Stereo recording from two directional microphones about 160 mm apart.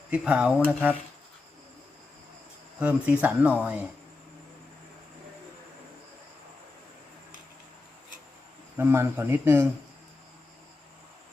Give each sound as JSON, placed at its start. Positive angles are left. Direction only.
{"t": 0.1, "sound": "speech", "side_deg": -5}
{"t": 2.7, "sound": "speech", "side_deg": -10}
{"t": 8.8, "sound": "speech", "side_deg": -15}